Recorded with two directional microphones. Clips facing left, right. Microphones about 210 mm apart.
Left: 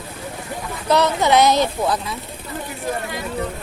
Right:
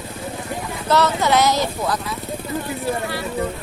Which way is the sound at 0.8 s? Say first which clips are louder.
Left 1 dB; 15° left (ahead or behind).